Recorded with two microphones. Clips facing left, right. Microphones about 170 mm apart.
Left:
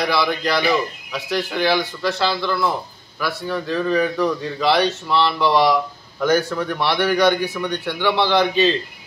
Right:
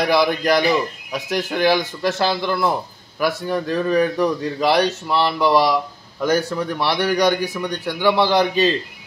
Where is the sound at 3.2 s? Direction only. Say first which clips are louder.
Right 4 dB; 45° right (ahead or behind).